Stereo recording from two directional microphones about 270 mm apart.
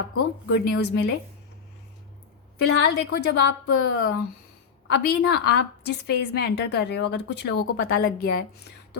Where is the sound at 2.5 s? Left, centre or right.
Left.